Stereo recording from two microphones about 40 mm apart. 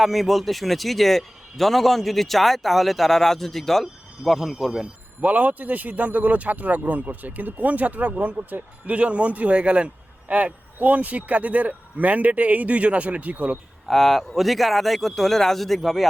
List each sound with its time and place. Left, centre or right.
0.0 s a man's voice: centre
5.2 s speech: right
13.8 s a man's voice: centre